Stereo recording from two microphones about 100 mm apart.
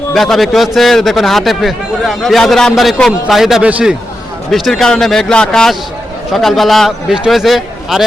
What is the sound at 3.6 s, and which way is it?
Speech, 15° right (ahead or behind).